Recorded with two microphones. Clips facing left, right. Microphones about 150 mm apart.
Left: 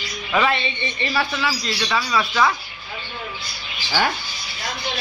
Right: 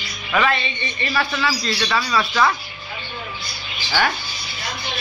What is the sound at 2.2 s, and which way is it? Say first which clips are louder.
Speech: right 1 dB; 5° left (ahead or behind).